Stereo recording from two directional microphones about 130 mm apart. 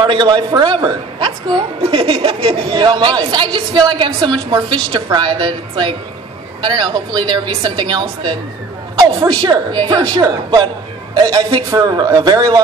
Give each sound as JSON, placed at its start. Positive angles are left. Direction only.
{"t": 0.0, "sound": "a woman's voice", "side_deg": -35}